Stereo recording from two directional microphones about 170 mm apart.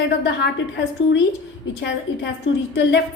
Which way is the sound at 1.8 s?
90° left.